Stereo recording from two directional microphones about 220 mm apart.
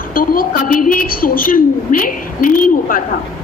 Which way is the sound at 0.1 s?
40° left (ahead or behind).